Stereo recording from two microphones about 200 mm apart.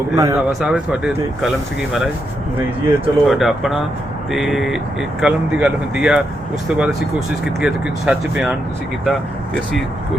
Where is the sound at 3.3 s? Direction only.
Centre (ahead or behind).